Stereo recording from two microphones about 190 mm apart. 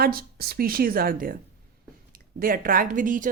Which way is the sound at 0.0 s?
50° right (ahead or behind).